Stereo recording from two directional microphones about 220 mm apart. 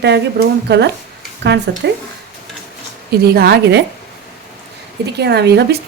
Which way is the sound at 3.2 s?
45° right (ahead or behind).